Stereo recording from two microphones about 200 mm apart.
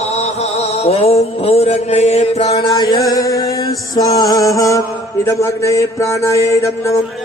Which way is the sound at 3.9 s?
20° left (ahead or behind).